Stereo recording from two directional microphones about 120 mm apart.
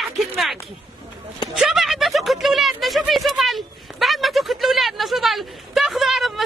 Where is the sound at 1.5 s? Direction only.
Centre (ahead or behind).